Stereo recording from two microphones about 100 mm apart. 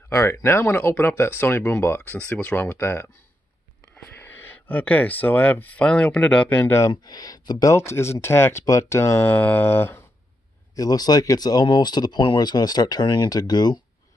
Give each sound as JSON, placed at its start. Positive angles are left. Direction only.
{"t": 0.1, "sound": "speech", "side_deg": 30}
{"t": 6.6, "sound": "speech", "side_deg": 30}
{"t": 6.9, "sound": "speech", "side_deg": 40}
{"t": 7.7, "sound": "speech", "side_deg": 25}
{"t": 10.8, "sound": "speech", "side_deg": 40}